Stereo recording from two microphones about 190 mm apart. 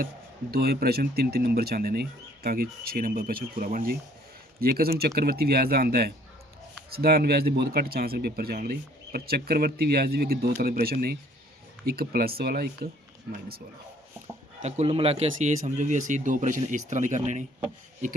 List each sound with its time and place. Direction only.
0.5 s speech: 55° right (ahead or behind)
14.6 s speech: 35° right (ahead or behind)